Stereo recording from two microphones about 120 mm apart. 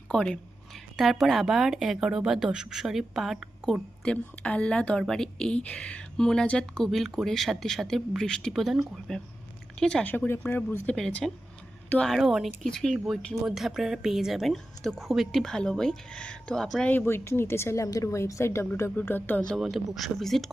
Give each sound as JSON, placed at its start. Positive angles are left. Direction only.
{"t": 0.1, "sound": "a woman's voice", "side_deg": 5}
{"t": 10.8, "sound": "a woman's voice", "side_deg": 5}
{"t": 16.9, "sound": "a woman's voice", "side_deg": 20}
{"t": 19.5, "sound": "a woman's voice", "side_deg": 0}